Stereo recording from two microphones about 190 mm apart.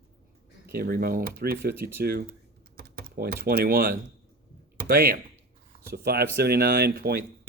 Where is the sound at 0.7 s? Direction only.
55° right (ahead or behind).